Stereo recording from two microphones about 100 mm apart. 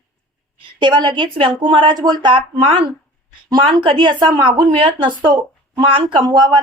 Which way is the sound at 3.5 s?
55° right (ahead or behind).